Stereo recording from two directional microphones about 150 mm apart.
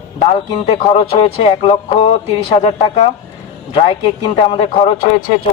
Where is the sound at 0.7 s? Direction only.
40° left (ahead or behind).